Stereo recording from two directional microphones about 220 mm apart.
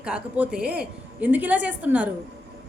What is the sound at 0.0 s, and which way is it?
A woman's voice, 5° right (ahead or behind).